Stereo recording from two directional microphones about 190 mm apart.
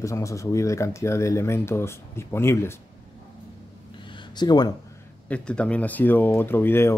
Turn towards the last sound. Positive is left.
turn(degrees=10)  # may be behind; listen again after turning